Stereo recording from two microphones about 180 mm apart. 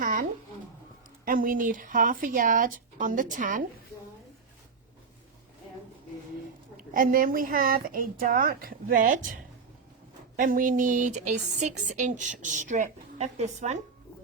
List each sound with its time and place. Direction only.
0.0 s a sound: 50° right (ahead or behind)
1.2 s speech: 50° right (ahead or behind)
6.9 s speech: 50° right (ahead or behind)
10.3 s speech: 50° right (ahead or behind)